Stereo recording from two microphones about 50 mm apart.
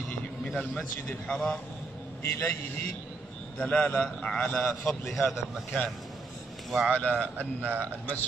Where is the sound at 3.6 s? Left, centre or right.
Left.